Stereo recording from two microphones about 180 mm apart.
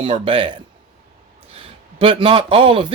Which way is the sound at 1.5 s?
30° right (ahead or behind).